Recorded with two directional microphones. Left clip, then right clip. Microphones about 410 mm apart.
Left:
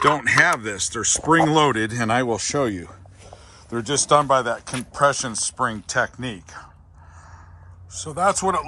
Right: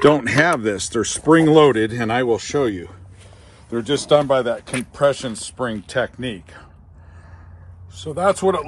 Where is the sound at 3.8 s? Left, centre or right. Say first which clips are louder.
Right 2 dB; centre.